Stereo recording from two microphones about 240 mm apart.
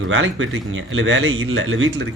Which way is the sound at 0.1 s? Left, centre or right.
Right.